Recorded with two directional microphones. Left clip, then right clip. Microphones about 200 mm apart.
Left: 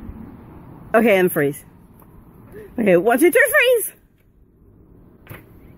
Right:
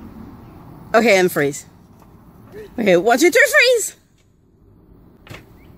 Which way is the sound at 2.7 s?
15° left (ahead or behind).